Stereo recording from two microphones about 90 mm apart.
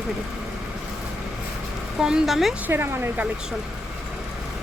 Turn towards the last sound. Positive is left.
turn(degrees=-25)  # may be behind; listen again after turning